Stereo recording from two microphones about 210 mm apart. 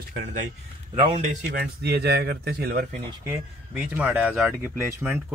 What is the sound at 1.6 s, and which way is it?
Speech, 50° right (ahead or behind).